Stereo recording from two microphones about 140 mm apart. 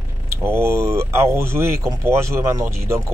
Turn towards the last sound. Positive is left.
turn(degrees=-20)  # may be behind; listen again after turning